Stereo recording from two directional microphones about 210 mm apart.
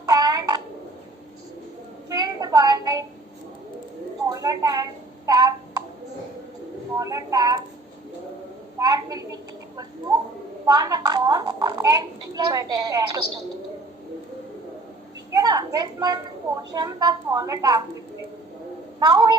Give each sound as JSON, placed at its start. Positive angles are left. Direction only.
{"t": 0.0, "sound": "a sound", "side_deg": -15}
{"t": 2.0, "sound": "child singing", "side_deg": -20}
{"t": 4.3, "sound": "a sound", "side_deg": -15}
{"t": 7.0, "sound": "a woman's voice", "side_deg": -15}
{"t": 8.8, "sound": "a woman's voice", "side_deg": -15}
{"t": 10.7, "sound": "a woman's voice", "side_deg": -20}
{"t": 15.3, "sound": "a sound", "side_deg": -15}
{"t": 16.7, "sound": "a woman's voice", "side_deg": -20}
{"t": 18.9, "sound": "a woman's voice", "side_deg": -20}